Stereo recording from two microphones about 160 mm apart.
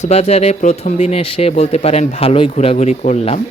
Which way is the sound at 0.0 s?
40° left (ahead or behind).